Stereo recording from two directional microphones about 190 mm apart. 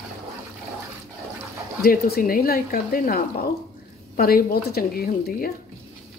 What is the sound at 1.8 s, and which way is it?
A woman's voice, 50° left (ahead or behind).